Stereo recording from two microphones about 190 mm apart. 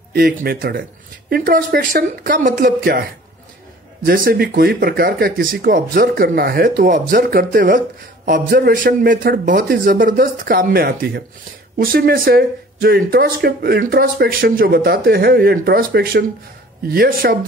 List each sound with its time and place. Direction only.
0.1 s speech: 55° right (ahead or behind)